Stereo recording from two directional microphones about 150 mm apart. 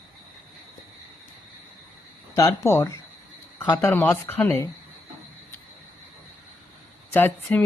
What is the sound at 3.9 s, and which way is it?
Speech, 10° left (ahead or behind).